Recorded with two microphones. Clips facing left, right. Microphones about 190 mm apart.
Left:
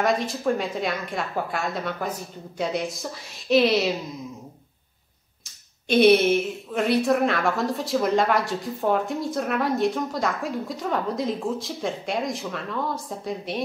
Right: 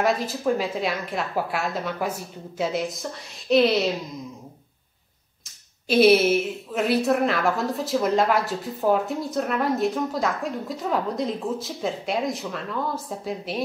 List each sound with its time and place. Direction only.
0.0 s a woman's voice: 5° right (ahead or behind)
5.9 s a woman's voice: 5° right (ahead or behind)